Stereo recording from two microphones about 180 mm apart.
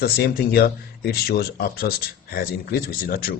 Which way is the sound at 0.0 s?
60° left (ahead or behind).